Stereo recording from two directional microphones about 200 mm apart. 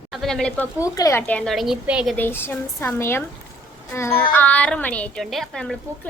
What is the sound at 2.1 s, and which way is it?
A woman's voice, 10° left (ahead or behind).